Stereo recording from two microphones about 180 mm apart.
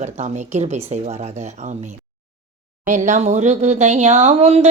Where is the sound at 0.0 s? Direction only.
40° right (ahead or behind).